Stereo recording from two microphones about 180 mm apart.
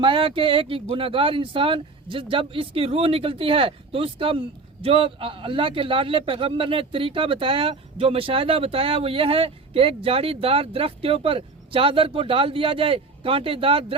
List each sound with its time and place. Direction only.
0.0 s speech: 30° right (ahead or behind)